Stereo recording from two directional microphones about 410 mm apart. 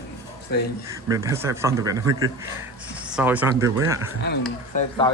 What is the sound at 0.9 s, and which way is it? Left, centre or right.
A man's voice, centre.